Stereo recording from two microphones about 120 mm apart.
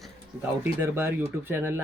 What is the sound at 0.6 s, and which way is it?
Speech, 20° right (ahead or behind).